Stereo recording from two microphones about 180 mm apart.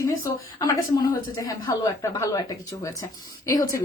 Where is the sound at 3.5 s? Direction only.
20° left (ahead or behind).